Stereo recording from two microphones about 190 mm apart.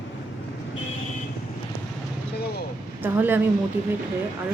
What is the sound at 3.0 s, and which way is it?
Speech, 10° right (ahead or behind).